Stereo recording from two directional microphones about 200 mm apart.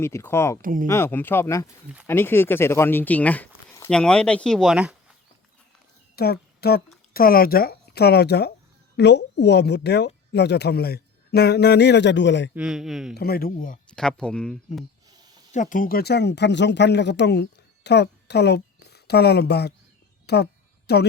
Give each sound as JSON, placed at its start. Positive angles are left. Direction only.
{"t": 0.0, "sound": "speech", "side_deg": 10}
{"t": 0.6, "sound": "speech", "side_deg": -45}
{"t": 0.9, "sound": "speech", "side_deg": 10}
{"t": 6.1, "sound": "speech", "side_deg": 50}
{"t": 12.5, "sound": "speech", "side_deg": -5}
{"t": 13.1, "sound": "speech", "side_deg": 50}
{"t": 13.9, "sound": "speech", "side_deg": 5}
{"t": 15.5, "sound": "a woman's voice", "side_deg": 40}
{"t": 20.2, "sound": "a sound", "side_deg": 55}